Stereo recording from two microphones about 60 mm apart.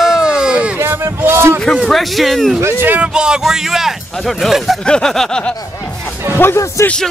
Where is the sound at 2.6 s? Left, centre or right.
Right.